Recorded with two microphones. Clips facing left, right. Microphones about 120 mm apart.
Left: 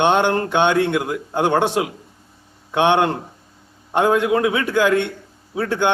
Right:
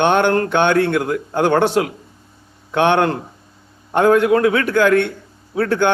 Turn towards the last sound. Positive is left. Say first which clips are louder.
# right 3 dB
turn(degrees=25)  # may be behind; listen again after turning